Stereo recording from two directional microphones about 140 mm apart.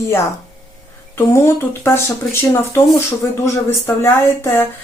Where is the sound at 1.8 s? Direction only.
15° left (ahead or behind).